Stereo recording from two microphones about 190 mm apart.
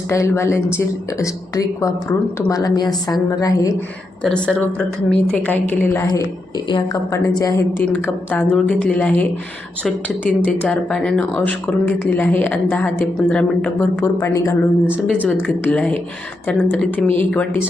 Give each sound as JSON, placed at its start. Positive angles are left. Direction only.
{"t": 0.1, "sound": "a woman's voice", "side_deg": 15}
{"t": 4.2, "sound": "speech", "side_deg": 5}
{"t": 15.3, "sound": "speech", "side_deg": 0}